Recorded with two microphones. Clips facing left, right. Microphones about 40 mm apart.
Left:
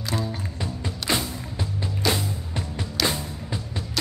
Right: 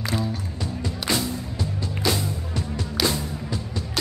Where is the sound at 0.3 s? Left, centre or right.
Centre.